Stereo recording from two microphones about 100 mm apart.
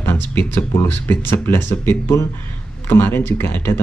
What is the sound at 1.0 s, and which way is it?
Speech, 20° left (ahead or behind).